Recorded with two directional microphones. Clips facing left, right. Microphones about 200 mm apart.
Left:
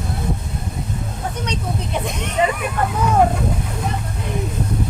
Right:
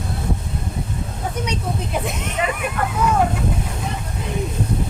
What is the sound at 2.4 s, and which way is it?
Speech, 30° left (ahead or behind).